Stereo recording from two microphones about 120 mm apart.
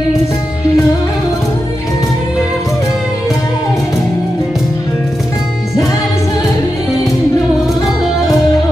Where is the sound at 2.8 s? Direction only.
30° left (ahead or behind).